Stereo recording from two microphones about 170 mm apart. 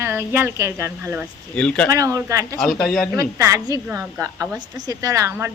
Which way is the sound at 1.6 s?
5° left (ahead or behind).